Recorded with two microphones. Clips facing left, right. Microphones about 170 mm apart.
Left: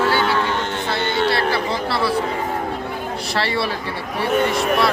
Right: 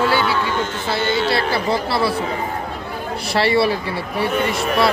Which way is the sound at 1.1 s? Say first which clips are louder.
Even; 50° left (ahead or behind).